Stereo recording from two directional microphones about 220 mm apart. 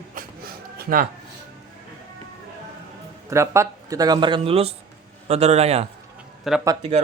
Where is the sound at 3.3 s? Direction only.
15° right (ahead or behind); by 5.8 s 30° right (ahead or behind).